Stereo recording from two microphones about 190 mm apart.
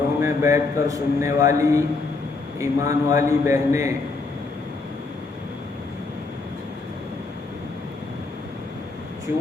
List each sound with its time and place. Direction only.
0.2 s a man's voice: 15° right (ahead or behind)